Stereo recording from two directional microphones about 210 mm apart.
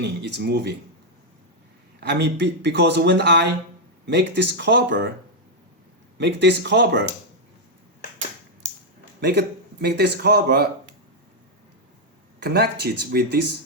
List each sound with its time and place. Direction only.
0.0 s speech: 55° right (ahead or behind)
2.0 s speech: 50° right (ahead or behind)
6.1 s speech: 55° right (ahead or behind)
9.2 s speech: 50° right (ahead or behind)
12.4 s speech: 50° right (ahead or behind)